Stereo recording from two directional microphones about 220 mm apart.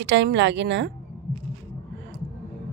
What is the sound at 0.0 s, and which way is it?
Speech, 55° right (ahead or behind).